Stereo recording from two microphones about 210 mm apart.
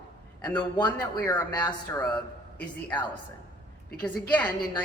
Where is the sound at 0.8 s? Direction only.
15° left (ahead or behind).